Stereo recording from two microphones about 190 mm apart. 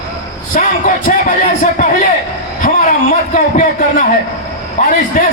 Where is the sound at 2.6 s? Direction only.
40° left (ahead or behind).